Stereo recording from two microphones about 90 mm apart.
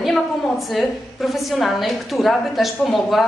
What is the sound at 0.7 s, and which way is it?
A woman's voice, centre (ahead or behind).